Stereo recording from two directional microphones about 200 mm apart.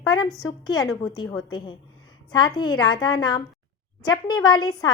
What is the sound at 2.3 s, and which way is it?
A woman's voice, 20° left (ahead or behind).